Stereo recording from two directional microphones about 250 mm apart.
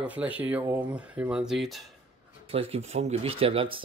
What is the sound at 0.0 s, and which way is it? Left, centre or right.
Speech, centre.